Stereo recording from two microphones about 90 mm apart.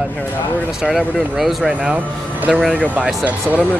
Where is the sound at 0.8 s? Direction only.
Centre (ahead or behind).